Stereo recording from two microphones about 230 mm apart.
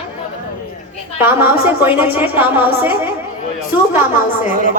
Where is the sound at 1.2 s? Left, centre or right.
Centre.